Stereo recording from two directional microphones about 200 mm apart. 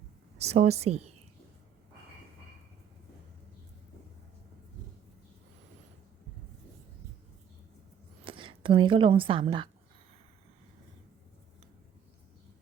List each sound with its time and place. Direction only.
0.4 s a woman's voice: 35° right (ahead or behind)
8.2 s speech: 25° right (ahead or behind)